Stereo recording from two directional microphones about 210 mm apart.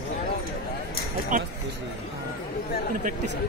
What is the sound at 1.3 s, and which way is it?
Speech, 40° right (ahead or behind).